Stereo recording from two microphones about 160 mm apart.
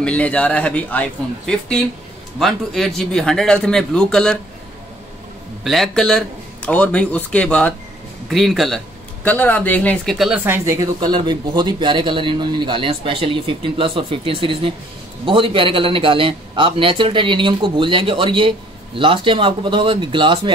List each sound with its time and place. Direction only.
0.0 s a man's voice: 5° left (ahead or behind)
5.6 s a man's voice: centre (ahead or behind)
10.1 s a man's voice: 5° right (ahead or behind); by 20.5 s 30° right (ahead or behind)